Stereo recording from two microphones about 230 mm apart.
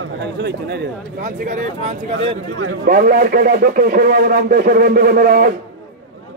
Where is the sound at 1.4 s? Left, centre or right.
Right.